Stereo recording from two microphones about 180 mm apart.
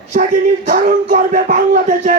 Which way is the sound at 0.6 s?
45° right (ahead or behind).